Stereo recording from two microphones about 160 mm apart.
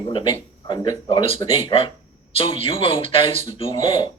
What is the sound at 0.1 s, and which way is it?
Speech, 30° left (ahead or behind).